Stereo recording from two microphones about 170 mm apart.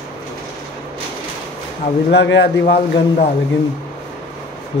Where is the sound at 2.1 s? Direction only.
90° left; by 3.3 s 65° left (ahead or behind).